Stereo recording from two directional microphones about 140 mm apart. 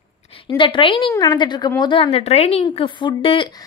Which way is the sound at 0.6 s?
35° left (ahead or behind).